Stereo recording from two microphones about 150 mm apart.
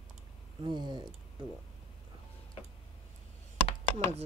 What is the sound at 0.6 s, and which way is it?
Speech, 30° right (ahead or behind).